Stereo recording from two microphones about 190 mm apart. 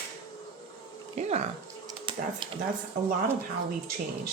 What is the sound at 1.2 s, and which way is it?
Speech, 35° right (ahead or behind).